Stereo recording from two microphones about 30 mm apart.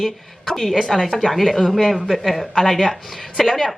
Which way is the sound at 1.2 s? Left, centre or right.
Centre.